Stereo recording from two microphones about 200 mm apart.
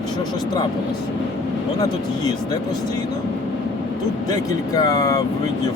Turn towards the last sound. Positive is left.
turn(degrees=15)  # may be behind; listen again after turning